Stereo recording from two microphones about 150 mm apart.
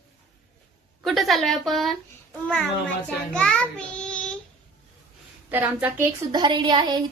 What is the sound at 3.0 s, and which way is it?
A child's voice, 5° left (ahead or behind).